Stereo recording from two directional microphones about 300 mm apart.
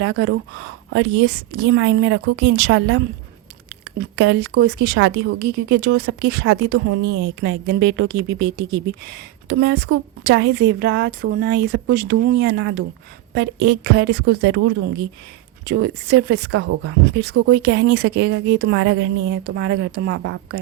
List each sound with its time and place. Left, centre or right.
0.0 s a woman's voice: right
15.6 s a woman's voice: right